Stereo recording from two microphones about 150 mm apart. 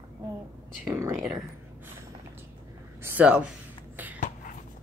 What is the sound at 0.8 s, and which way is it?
Speech, 20° right (ahead or behind).